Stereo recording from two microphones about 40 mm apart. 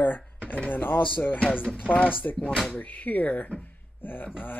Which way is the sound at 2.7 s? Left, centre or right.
Left.